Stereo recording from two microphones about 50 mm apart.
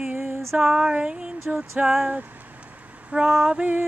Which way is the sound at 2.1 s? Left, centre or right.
Right.